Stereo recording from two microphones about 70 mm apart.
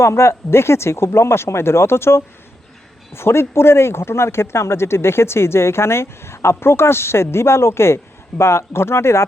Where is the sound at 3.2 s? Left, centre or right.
Left.